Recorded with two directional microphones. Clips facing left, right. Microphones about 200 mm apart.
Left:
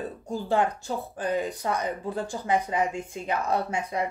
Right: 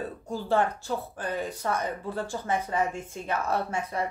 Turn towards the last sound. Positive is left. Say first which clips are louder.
# left 2 dB
turn(degrees=15)  # may be behind; listen again after turning